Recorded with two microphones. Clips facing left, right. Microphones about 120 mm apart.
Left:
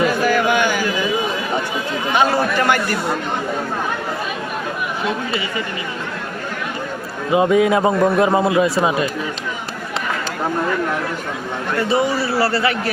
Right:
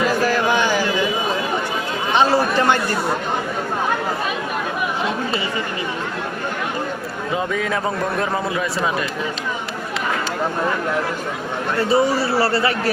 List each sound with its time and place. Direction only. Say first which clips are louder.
0.3 s a sound: left 2 dB; 30° right (ahead or behind)
2.1 s chatter: right 1 dB; 25° right (ahead or behind)
7.3 s a man's voice: left 9 dB; 20° left (ahead or behind)
11.9 s a man's voice: right 2 dB; 35° right (ahead or behind)